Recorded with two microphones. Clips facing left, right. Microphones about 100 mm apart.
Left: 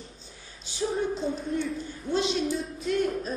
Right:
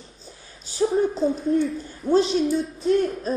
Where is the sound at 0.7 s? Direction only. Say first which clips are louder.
Right 7 dB; 40° right (ahead or behind).